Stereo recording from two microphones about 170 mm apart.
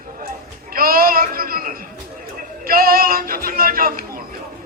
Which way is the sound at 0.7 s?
60° right (ahead or behind).